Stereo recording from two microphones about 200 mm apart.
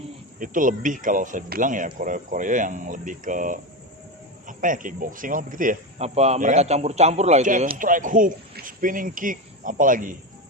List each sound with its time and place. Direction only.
0.3 s speech: 40° right (ahead or behind)